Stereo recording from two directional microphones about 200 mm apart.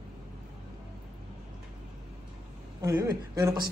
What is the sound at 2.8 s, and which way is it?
Speech, 15° right (ahead or behind).